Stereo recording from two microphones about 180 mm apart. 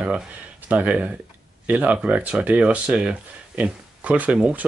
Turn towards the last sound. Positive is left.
turn(degrees=-5)  # may be behind; listen again after turning